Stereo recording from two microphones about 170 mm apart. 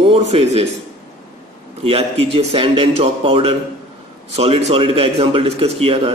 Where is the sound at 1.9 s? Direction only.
35° right (ahead or behind).